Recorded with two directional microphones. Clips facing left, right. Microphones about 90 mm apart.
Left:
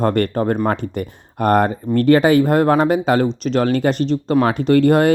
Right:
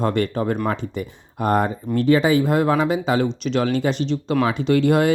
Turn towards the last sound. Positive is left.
turn(degrees=50)  # may be behind; listen again after turning